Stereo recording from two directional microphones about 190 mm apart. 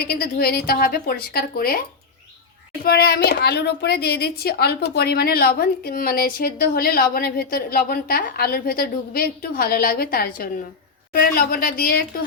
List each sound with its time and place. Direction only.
0.0 s a child's voice: 55° left (ahead or behind)
2.8 s a child's voice: 55° left (ahead or behind)